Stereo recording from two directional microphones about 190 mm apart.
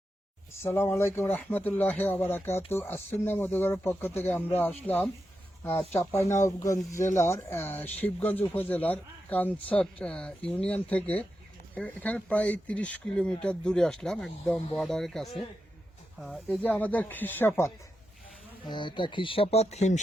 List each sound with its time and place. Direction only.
0.6 s speech: 10° left (ahead or behind)
18.6 s speech: 25° left (ahead or behind)